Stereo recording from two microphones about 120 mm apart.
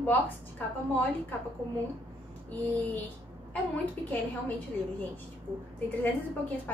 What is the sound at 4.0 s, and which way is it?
Speech, 15° left (ahead or behind).